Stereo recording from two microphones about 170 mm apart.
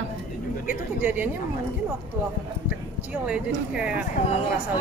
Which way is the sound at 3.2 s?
5° right (ahead or behind).